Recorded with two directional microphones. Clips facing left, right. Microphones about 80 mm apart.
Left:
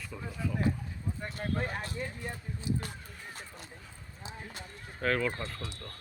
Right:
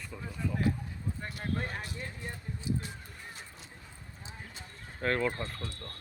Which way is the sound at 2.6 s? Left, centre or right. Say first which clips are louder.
Even; left.